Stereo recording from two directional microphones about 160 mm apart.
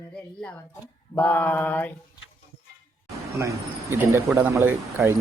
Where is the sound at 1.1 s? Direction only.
10° left (ahead or behind).